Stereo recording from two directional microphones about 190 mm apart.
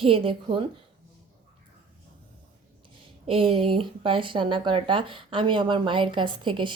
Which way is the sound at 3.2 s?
30° right (ahead or behind).